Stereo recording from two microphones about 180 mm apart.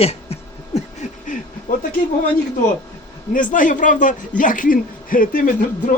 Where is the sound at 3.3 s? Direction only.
45° left (ahead or behind).